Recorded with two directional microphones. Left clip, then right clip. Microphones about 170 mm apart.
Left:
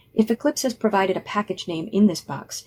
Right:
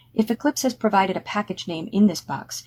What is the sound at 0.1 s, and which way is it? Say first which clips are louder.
Speech: left 1 dB; 45° right (ahead or behind).